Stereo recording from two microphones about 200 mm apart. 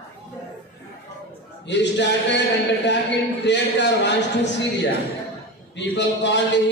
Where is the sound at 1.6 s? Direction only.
60° left (ahead or behind).